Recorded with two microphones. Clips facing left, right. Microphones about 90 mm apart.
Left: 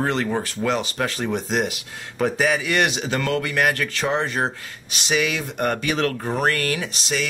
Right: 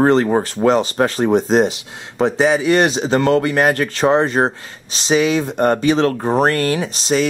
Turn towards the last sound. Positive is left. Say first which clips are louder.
# right 8 dB
turn(degrees=-35)  # may be behind; listen again after turning